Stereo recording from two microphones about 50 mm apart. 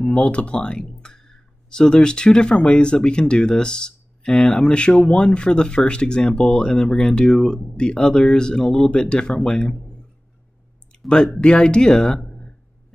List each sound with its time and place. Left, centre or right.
0.0 s speech: centre
10.9 s a sound: centre
11.3 s speech: centre